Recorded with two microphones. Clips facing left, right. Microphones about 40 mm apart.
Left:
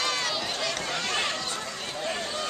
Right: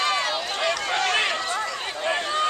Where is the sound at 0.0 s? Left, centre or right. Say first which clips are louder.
Right 5 dB; right.